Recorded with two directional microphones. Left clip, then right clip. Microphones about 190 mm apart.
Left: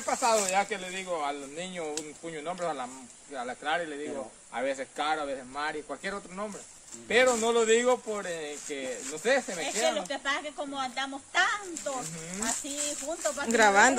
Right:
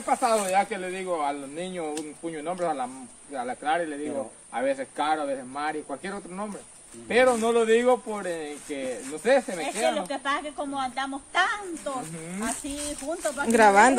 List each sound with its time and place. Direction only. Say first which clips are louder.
0.0 s speech: right 3 dB; 30° left (ahead or behind)
9.8 s speech: right 3 dB; 10° left (ahead or behind)
13.1 s speech: right 4 dB; 10° left (ahead or behind)
13.5 s speech: right 4 dB; 5° right (ahead or behind)